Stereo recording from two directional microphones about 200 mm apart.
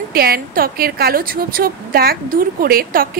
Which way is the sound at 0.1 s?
50° right (ahead or behind).